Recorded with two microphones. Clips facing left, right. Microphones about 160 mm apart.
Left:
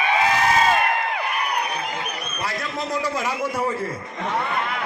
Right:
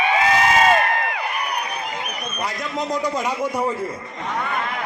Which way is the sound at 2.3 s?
15° right (ahead or behind).